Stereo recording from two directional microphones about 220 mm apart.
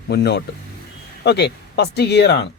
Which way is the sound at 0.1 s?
50° left (ahead or behind).